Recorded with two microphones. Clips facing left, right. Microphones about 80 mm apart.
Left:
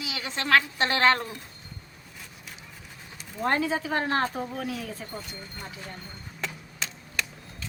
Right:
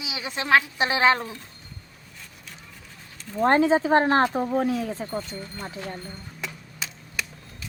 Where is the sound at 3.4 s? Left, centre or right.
Right.